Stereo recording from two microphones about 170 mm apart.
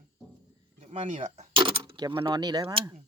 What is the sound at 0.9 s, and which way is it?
Speech, 45° right (ahead or behind).